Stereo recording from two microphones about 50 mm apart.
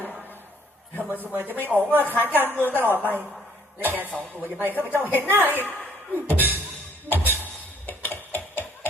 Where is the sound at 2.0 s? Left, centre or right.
Left.